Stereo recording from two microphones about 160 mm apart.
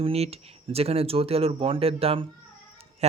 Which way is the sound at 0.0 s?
40° right (ahead or behind).